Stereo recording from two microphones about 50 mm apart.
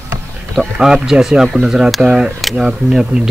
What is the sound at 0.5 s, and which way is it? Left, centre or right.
Speech, centre.